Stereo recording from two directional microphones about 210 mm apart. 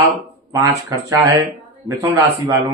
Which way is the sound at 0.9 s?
20° right (ahead or behind).